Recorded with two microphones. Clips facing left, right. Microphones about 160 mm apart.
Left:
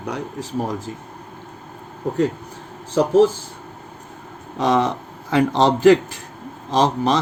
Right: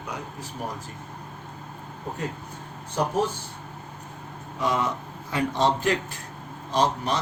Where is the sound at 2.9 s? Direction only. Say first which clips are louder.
Left 10 dB; 90° left.